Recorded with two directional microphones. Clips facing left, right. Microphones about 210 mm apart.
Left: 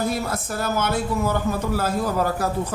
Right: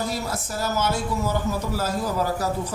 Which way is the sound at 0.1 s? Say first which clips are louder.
Left 3 dB; 55° left (ahead or behind).